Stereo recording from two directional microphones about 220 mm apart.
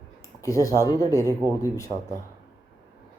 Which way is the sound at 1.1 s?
15° right (ahead or behind).